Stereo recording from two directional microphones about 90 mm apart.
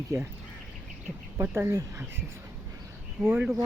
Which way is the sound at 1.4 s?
30° right (ahead or behind).